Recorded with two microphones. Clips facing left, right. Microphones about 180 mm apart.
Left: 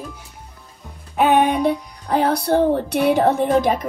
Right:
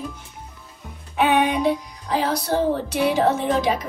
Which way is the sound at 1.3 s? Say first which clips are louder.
Left 3 dB; 50° left (ahead or behind).